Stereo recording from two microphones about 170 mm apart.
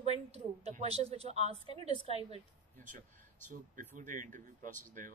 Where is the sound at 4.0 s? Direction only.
50° right (ahead or behind).